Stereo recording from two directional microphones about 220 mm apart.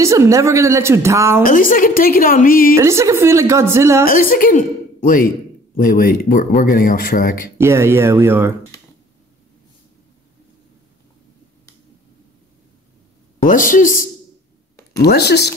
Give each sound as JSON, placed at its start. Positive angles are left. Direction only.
{"t": 0.0, "sound": "a woman's voice", "side_deg": -15}
{"t": 1.4, "sound": "speech", "side_deg": 40}
{"t": 2.7, "sound": "a woman's voice", "side_deg": -10}
{"t": 4.0, "sound": "speech", "side_deg": 40}
{"t": 7.5, "sound": "a woman's voice", "side_deg": -10}
{"t": 13.4, "sound": "speech", "side_deg": 40}